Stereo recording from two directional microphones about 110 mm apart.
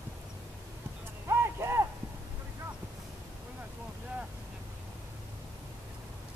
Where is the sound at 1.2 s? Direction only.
25° right (ahead or behind).